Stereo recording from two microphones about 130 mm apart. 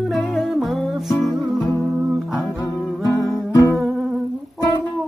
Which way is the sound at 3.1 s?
25° left (ahead or behind).